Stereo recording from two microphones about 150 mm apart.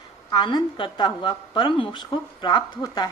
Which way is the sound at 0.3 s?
30° left (ahead or behind).